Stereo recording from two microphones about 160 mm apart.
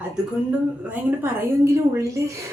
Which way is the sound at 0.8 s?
15° right (ahead or behind).